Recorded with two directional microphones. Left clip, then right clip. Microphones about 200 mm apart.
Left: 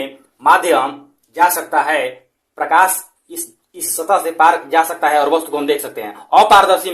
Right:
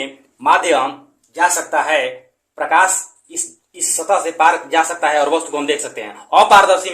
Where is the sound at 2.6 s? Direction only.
40° left (ahead or behind).